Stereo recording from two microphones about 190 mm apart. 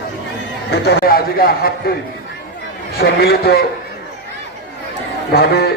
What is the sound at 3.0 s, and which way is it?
Speech, 55° left (ahead or behind).